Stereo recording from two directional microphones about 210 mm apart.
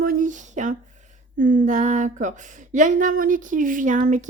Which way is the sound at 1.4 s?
40° right (ahead or behind).